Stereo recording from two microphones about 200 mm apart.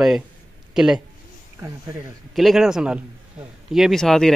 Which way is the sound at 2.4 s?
Centre (ahead or behind).